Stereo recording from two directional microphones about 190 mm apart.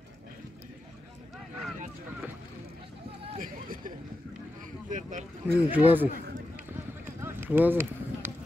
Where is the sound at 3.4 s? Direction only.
45° right (ahead or behind).